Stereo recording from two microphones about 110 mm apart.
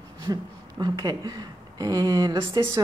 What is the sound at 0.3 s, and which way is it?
Speech, 35° right (ahead or behind).